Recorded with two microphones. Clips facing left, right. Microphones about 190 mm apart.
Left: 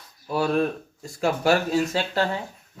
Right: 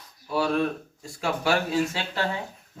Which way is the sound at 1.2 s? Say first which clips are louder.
Left 4 dB; 45° left (ahead or behind).